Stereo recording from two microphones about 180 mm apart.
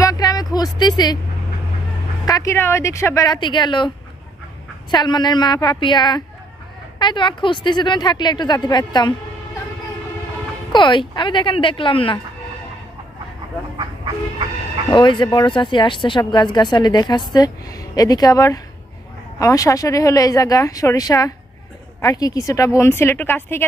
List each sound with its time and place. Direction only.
0.0 s a sound: 20° left (ahead or behind)
2.2 s speech: 20° left (ahead or behind)
4.9 s speech: 25° left (ahead or behind)
10.7 s speech: 25° left (ahead or behind)
14.9 s speech: 25° left (ahead or behind)